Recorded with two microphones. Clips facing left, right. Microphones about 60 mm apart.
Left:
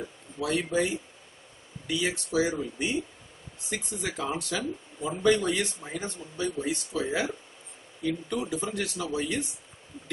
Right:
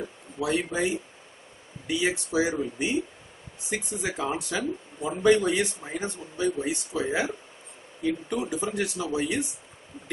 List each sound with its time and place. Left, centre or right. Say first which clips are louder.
0.4 s speech: right 1 dB; centre